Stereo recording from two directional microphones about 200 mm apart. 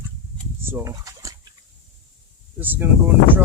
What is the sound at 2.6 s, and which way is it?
Speech, 10° right (ahead or behind).